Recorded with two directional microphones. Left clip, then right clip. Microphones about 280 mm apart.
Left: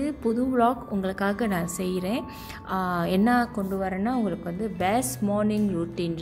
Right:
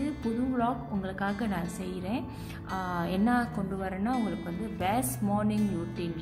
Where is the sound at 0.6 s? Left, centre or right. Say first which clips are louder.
Left 8 dB; left.